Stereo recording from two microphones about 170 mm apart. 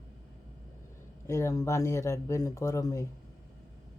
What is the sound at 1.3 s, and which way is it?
Speech, 15° left (ahead or behind).